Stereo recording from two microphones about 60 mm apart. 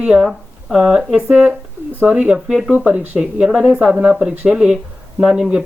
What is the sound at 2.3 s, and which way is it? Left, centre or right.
Speech, centre.